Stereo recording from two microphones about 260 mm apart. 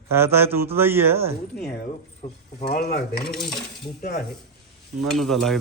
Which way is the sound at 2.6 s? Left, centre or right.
Left.